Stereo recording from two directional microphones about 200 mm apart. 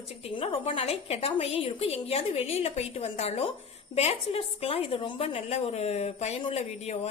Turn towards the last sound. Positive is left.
turn(degrees=30)  # may be behind; listen again after turning